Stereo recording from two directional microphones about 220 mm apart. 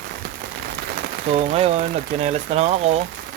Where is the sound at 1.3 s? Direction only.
25° right (ahead or behind).